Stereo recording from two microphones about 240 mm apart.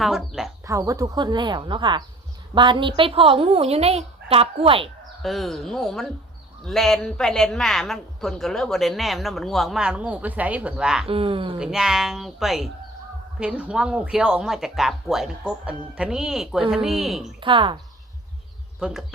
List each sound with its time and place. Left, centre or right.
0.0 s speech: centre
0.6 s a woman's voice: centre
5.2 s speech: centre
11.1 s a woman's voice: right
11.6 s speech: centre
17.4 s a woman's voice: right
18.8 s speech: centre